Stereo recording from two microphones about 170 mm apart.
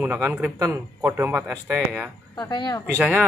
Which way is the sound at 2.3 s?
25° left (ahead or behind).